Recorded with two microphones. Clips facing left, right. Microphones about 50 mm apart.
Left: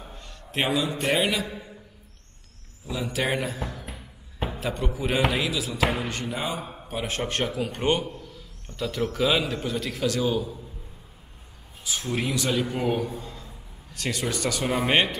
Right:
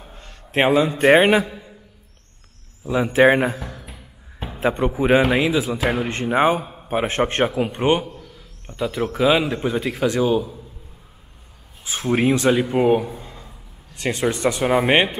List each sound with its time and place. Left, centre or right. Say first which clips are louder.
0.1 s a man's voice: right 9 dB; right
2.9 s a man's voice: right 12 dB; right
4.6 s a man's voice: right 12 dB; right
11.8 s a man's voice: right 9 dB; right
13.2 s a sound: right 1 dB; right
13.9 s a man's voice: right 7 dB; right